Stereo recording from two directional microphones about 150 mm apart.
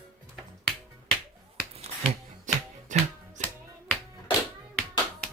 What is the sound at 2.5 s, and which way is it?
Music, 55° right (ahead or behind).